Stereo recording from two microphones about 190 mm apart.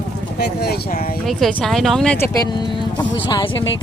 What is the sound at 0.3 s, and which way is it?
Speech, 55° left (ahead or behind).